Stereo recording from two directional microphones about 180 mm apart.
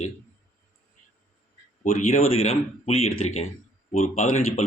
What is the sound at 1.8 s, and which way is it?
Speech, 40° left (ahead or behind).